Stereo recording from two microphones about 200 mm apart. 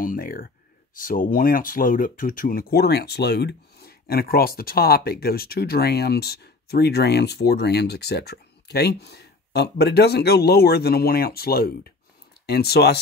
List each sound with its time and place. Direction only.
0.0 s speech: 45° left (ahead or behind)